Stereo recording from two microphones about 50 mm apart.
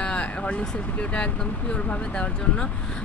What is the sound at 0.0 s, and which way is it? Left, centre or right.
Vehicle, left.